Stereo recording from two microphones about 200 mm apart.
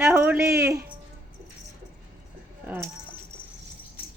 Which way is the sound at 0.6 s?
10° right (ahead or behind).